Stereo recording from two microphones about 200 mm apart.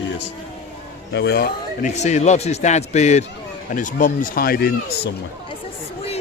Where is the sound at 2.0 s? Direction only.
35° left (ahead or behind).